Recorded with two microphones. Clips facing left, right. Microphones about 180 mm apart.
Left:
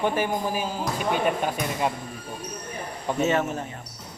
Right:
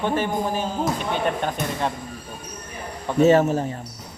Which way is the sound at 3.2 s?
35° right (ahead or behind).